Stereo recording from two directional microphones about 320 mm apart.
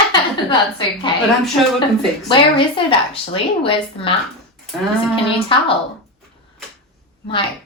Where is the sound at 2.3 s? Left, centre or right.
Centre.